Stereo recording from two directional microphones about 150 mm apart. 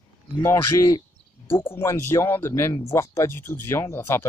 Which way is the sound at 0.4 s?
20° left (ahead or behind).